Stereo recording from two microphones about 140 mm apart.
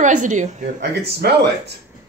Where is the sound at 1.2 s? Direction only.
90° right.